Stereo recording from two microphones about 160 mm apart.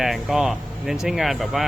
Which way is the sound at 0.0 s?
Centre (ahead or behind).